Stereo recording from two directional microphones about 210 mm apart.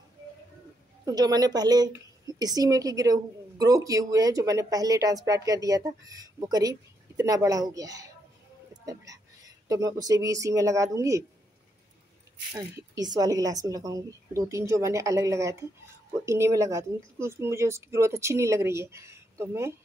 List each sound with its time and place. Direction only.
1.0 s speech: 20° right (ahead or behind)
12.5 s speech: 20° right (ahead or behind)